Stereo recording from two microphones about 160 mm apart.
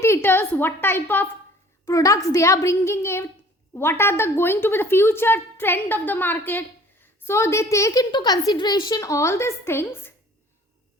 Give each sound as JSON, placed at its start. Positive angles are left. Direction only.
{"t": 0.0, "sound": "a woman's voice", "side_deg": 15}